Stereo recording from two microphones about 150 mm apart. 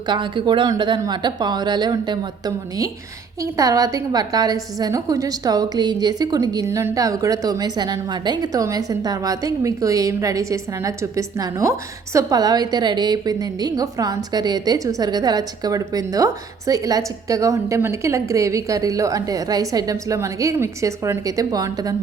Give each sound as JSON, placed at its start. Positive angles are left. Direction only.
{"t": 0.1, "sound": "a woman's voice", "side_deg": -30}